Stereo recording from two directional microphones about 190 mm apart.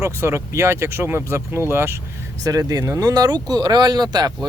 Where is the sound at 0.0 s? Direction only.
15° right (ahead or behind).